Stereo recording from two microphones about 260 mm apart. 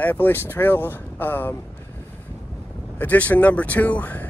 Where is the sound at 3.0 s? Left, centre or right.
Centre.